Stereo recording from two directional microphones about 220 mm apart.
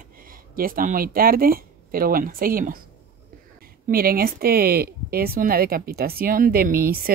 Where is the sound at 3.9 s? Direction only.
40° right (ahead or behind).